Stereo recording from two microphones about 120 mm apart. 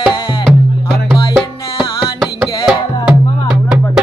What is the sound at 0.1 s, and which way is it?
Music, 40° left (ahead or behind).